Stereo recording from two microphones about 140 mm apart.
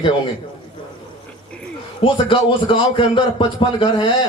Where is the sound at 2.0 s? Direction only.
40° left (ahead or behind).